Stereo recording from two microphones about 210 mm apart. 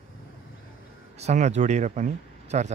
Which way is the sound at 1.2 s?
35° right (ahead or behind).